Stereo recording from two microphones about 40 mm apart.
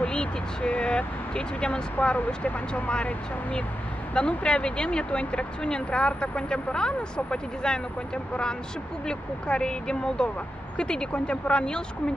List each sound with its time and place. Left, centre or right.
0.0 s speech: left
2.0 s speech: left
4.1 s speech: left